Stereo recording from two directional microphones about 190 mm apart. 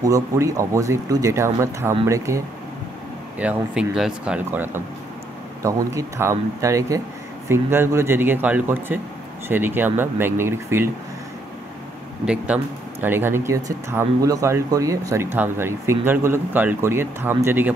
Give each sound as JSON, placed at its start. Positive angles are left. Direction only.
{"t": 0.0, "sound": "speech", "side_deg": -15}
{"t": 12.5, "sound": "speech", "side_deg": -5}